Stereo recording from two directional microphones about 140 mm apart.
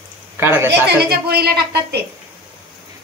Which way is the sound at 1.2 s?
90° right.